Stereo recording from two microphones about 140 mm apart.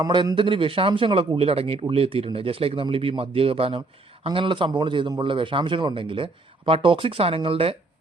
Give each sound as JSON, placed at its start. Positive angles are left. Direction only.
{"t": 0.0, "sound": "speech", "side_deg": -30}